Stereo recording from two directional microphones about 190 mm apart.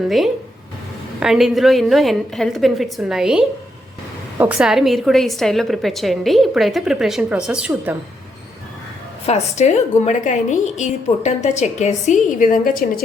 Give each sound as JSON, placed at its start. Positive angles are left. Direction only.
{"t": 1.2, "sound": "a woman's voice", "side_deg": 0}
{"t": 9.2, "sound": "a woman's voice", "side_deg": 35}